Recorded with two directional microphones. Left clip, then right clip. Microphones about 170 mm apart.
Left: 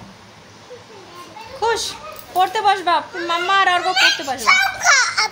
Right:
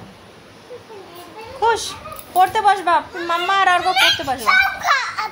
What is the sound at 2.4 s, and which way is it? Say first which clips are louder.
Speech: right 2 dB; 5° left (ahead or behind).